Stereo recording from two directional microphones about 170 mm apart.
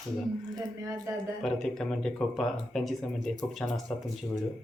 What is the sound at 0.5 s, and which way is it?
Speech, 20° right (ahead or behind).